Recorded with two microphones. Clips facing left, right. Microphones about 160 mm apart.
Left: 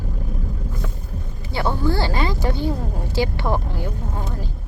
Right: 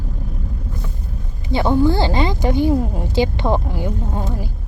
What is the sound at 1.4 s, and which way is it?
Speech, 20° right (ahead or behind).